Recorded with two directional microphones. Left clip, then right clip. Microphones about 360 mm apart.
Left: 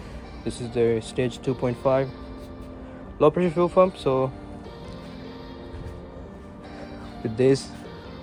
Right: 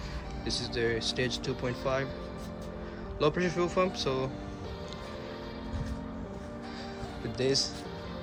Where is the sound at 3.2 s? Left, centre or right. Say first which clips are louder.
Left 9 dB; centre.